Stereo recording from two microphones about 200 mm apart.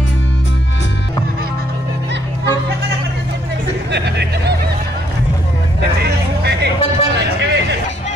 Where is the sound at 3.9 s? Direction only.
55° right (ahead or behind).